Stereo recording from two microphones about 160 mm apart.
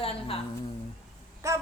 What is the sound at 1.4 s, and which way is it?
Speech, 20° right (ahead or behind).